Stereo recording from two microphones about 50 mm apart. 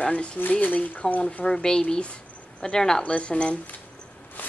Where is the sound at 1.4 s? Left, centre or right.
Centre.